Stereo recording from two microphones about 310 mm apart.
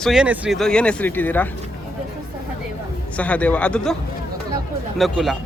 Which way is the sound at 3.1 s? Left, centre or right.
Centre.